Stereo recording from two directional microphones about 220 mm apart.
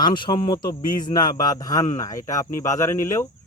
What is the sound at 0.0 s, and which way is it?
A man's voice, 20° left (ahead or behind).